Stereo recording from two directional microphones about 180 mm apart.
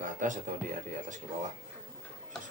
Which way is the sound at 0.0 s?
45° right (ahead or behind).